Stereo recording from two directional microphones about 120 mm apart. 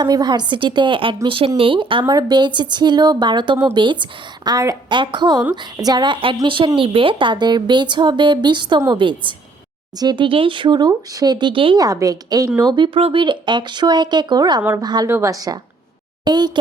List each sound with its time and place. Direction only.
0.0 s a woman's voice: 35° right (ahead or behind)
4.5 s a woman's voice: 30° right (ahead or behind)
4.9 s a woman's voice: 40° right (ahead or behind)
11.8 s a woman's voice: 30° right (ahead or behind)
15.0 s a woman's voice: 25° right (ahead or behind)